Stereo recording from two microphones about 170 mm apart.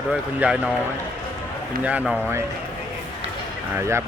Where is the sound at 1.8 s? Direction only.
10° right (ahead or behind).